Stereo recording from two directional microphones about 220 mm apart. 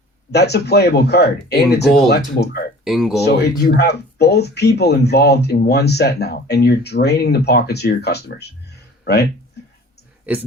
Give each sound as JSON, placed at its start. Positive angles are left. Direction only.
{"t": 0.3, "sound": "speech", "side_deg": 50}
{"t": 2.8, "sound": "speech", "side_deg": 0}
{"t": 3.2, "sound": "speech", "side_deg": 50}